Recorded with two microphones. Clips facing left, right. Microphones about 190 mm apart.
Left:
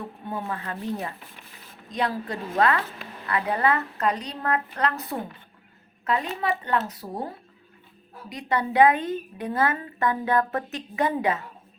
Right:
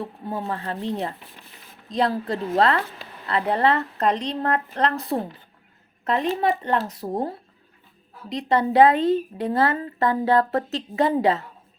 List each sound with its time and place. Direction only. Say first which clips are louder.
0.0 s speech: right 3 dB; 30° right (ahead or behind)
8.7 s speech: right 3 dB; 30° right (ahead or behind)